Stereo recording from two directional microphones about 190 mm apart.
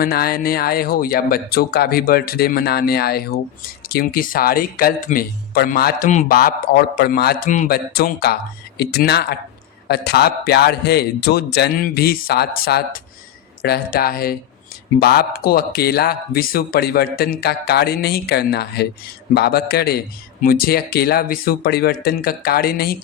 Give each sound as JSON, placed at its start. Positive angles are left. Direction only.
{"t": 0.0, "sound": "speech", "side_deg": 50}